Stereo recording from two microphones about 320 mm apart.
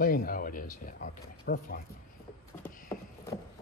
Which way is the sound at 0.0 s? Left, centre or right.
Left.